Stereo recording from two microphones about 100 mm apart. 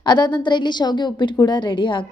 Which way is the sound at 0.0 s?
50° left (ahead or behind).